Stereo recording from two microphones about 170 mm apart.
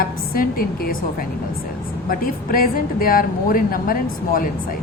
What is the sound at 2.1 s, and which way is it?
A woman's voice, 55° left (ahead or behind).